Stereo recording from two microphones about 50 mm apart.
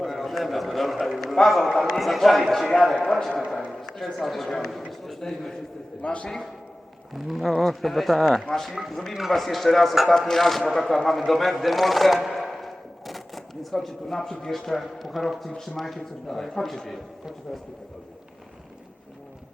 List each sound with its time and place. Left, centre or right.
0.0 s a sound: centre
1.8 s a man's voice: centre
6.0 s a man's voice: centre
6.2 s speech: centre
7.1 s a man's voice: centre